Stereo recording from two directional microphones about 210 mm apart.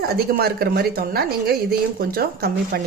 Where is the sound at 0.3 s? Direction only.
45° right (ahead or behind).